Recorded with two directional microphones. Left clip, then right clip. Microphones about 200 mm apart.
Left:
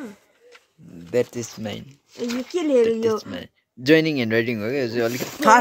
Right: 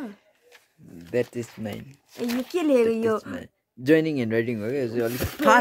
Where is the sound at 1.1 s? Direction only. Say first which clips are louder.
Left 4 dB; centre (ahead or behind).